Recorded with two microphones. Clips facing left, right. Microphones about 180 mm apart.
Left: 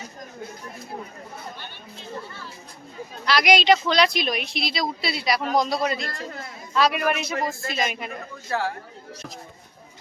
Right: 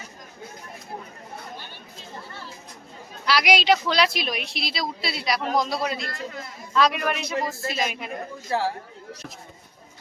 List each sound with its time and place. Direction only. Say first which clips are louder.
3.2 s a woman's voice: left 2 dB; 5° right (ahead or behind)
8.4 s speech: right 1 dB; 30° right (ahead or behind)